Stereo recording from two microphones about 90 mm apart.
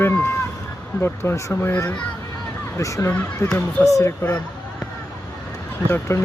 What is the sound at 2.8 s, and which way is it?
Speech, 35° left (ahead or behind).